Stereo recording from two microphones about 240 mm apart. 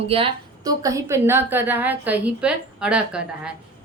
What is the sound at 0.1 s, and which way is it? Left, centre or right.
A woman's voice, centre.